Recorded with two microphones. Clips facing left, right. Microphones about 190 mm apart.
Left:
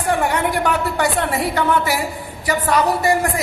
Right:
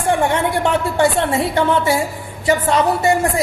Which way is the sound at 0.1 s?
25° right (ahead or behind).